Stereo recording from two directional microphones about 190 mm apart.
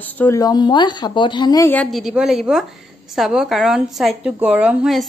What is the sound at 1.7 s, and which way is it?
A woman's voice, centre (ahead or behind).